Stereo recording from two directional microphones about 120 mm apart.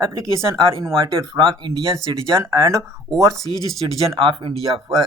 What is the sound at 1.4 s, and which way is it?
Speech, 40° right (ahead or behind).